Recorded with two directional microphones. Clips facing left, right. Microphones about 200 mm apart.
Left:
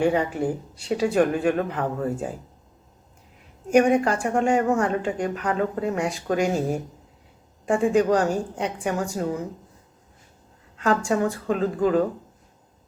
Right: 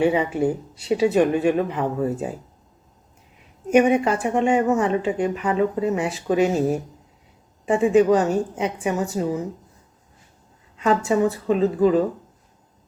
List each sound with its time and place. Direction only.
0.0 s speech: 5° right (ahead or behind)
3.7 s speech: 5° right (ahead or behind)
7.6 s speech: 5° right (ahead or behind)
10.8 s speech: 5° right (ahead or behind)